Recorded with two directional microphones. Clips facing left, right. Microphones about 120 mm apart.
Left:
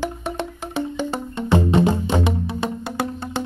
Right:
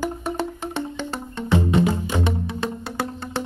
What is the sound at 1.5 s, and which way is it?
Music, 30° left (ahead or behind).